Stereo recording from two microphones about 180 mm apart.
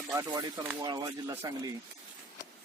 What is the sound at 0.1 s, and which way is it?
Speech, 15° right (ahead or behind).